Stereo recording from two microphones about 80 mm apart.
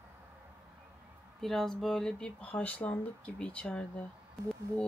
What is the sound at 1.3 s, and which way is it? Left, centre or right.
Speech, centre.